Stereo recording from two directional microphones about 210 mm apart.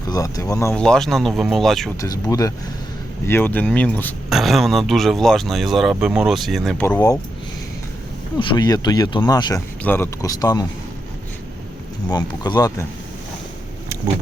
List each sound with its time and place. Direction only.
0.1 s speech: 15° left (ahead or behind); by 1.9 s centre (ahead or behind)
2.3 s speech: 15° left (ahead or behind)
8.4 s speech: 20° left (ahead or behind)
12.1 s speech: 20° left (ahead or behind)